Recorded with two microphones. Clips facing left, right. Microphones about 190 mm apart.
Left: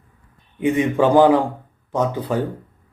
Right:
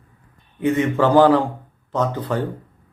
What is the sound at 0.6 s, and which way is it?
Speech, 15° left (ahead or behind).